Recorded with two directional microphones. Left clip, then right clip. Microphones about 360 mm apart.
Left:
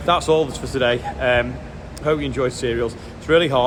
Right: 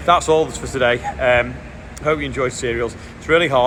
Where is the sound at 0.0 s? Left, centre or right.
Centre.